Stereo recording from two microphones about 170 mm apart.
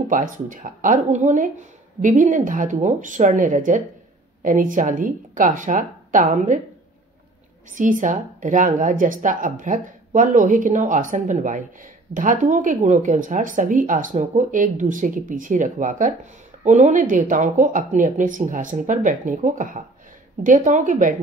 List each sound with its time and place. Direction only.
0.1 s speech: 50° right (ahead or behind)
7.7 s speech: 50° right (ahead or behind)